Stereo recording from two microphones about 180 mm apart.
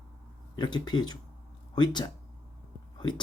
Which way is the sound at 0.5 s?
25° left (ahead or behind).